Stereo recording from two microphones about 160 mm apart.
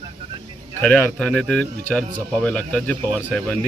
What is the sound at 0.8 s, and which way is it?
Speech, 5° left (ahead or behind).